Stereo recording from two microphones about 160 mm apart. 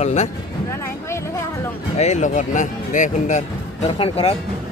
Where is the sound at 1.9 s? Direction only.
45° left (ahead or behind).